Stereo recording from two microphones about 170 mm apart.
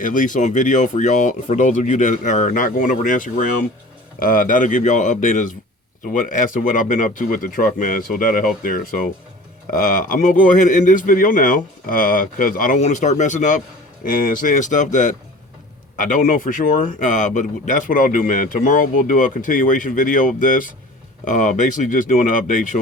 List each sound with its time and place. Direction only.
0.0 s speech: 50° left (ahead or behind)